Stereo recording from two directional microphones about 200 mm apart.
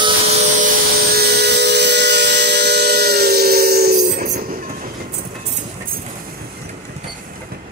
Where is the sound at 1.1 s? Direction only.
55° right (ahead or behind).